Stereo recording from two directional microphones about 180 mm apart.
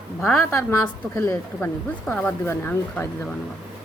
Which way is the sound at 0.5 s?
15° left (ahead or behind).